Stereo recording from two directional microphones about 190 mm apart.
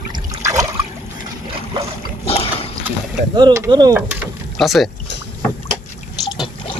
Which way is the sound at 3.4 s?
20° right (ahead or behind).